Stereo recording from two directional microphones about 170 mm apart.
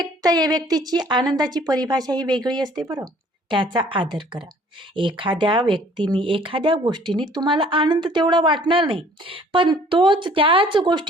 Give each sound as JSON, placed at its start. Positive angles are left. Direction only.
{"t": 0.0, "sound": "speech", "side_deg": -25}